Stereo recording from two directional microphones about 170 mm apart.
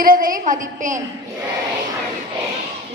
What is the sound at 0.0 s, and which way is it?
A woman's voice, 55° right (ahead or behind).